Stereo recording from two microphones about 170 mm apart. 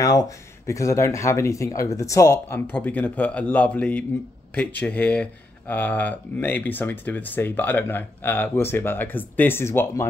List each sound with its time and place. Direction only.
0.0 s speech: 20° left (ahead or behind)